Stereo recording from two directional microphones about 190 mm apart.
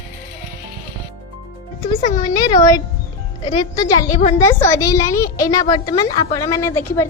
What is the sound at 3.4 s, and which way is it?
Speech, 20° left (ahead or behind).